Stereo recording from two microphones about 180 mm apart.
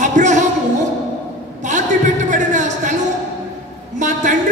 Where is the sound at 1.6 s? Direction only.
40° right (ahead or behind).